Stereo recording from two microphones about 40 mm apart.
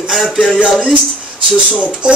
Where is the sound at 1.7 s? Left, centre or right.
Right.